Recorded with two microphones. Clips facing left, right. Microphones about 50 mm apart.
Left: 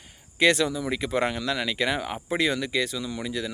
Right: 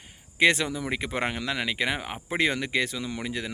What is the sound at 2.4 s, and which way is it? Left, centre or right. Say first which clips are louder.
A man's voice: right 1 dB; right.